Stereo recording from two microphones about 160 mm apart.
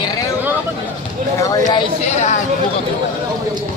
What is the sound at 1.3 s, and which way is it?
Speech, 20° left (ahead or behind).